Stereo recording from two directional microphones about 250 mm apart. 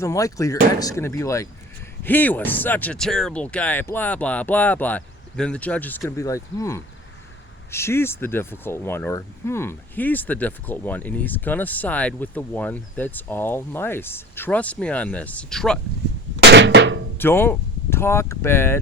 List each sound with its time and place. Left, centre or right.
0.0 s speech: centre
16.4 s a sound: right
17.2 s speech: centre